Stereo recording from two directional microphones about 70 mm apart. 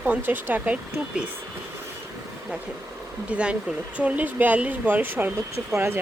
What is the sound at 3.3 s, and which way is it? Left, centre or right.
Speech, centre.